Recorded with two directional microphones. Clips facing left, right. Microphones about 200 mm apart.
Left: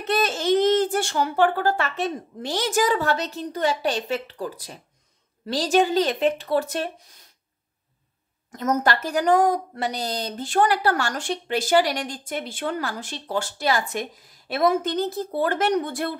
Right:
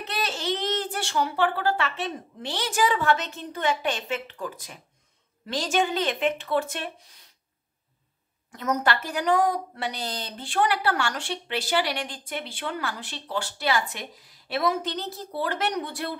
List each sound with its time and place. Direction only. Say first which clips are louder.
0.0 s a woman's voice: left 7 dB; 50° left (ahead or behind)
8.5 s a woman's voice: left 3 dB; 45° left (ahead or behind)